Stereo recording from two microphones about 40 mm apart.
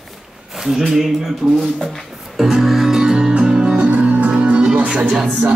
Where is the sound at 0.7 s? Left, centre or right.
Centre.